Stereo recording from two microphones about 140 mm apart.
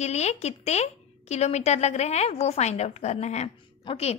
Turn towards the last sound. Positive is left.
turn(degrees=45)  # may be behind; listen again after turning